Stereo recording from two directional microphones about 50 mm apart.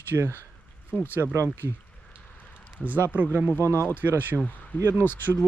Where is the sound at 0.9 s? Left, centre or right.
Left.